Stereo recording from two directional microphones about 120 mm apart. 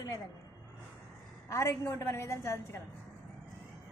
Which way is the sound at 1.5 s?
25° left (ahead or behind).